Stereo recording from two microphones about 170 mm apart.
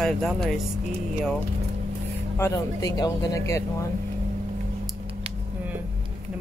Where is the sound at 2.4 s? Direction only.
20° left (ahead or behind).